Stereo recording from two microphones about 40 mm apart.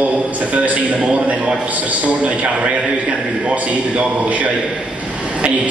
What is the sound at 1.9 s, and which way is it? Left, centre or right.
A man's voice, right.